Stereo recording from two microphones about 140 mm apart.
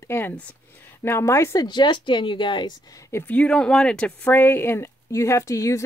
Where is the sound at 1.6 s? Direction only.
30° left (ahead or behind).